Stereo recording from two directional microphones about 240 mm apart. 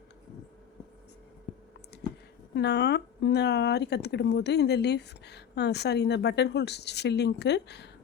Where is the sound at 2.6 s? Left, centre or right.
Left.